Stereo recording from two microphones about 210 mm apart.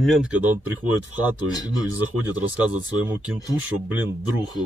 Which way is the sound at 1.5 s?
20° left (ahead or behind).